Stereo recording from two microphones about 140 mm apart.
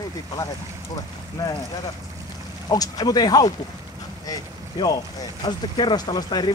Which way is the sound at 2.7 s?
25° left (ahead or behind).